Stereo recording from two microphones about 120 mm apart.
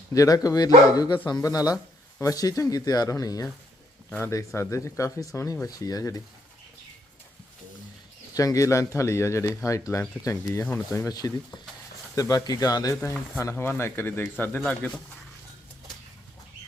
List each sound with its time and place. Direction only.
0.1 s speech: 30° left (ahead or behind)
8.4 s speech: 30° left (ahead or behind); by 15.0 s 10° left (ahead or behind)